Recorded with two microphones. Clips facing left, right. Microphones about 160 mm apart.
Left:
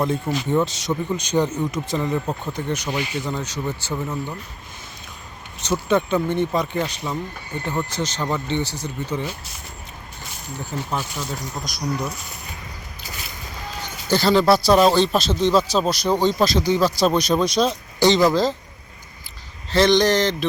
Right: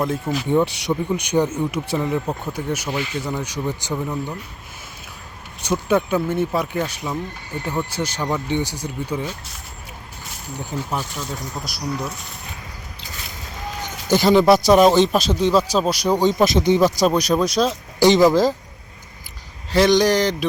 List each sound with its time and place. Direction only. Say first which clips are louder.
0.0 s speech: even; centre (ahead or behind)
0.4 s speech: right 3 dB; 15° right (ahead or behind)
2.9 s speech: right 1 dB; 15° left (ahead or behind)
3.2 s speech: right 1 dB; 10° right (ahead or behind)
5.9 s speech: even; 10° right (ahead or behind)
10.7 s speech: even; 15° right (ahead or behind)
13.8 s speech: right 3 dB; 15° right (ahead or behind)
17.1 s speech: right 1 dB; 5° right (ahead or behind)
18.0 s speech: right 3 dB; 15° right (ahead or behind)
19.7 s speech: right 1 dB; 10° right (ahead or behind)